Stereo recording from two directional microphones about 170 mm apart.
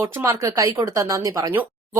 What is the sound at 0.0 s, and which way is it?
Speech, 15° right (ahead or behind).